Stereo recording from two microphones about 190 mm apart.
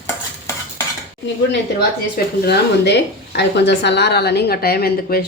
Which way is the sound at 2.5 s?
65° left (ahead or behind).